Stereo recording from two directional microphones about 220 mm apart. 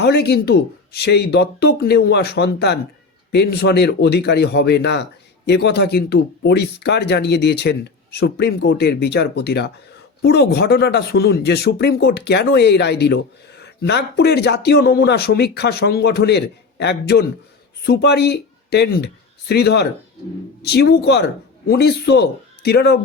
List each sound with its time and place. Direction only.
0.0 s a man's voice: 50° left (ahead or behind)